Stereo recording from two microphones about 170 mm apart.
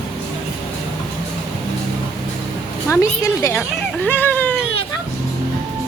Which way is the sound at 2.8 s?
15° left (ahead or behind).